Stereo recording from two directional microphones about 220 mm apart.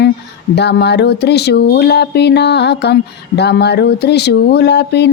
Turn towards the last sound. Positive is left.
turn(degrees=50)  # may be behind; listen again after turning